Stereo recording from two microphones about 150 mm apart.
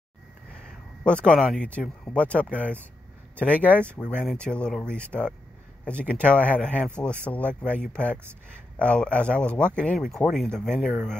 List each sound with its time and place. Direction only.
1.0 s speech: 5° left (ahead or behind)
4.0 s speech: 5° left (ahead or behind)